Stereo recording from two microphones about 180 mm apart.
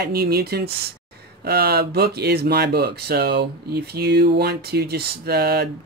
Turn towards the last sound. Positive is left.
turn(degrees=-65)  # may be behind; listen again after turning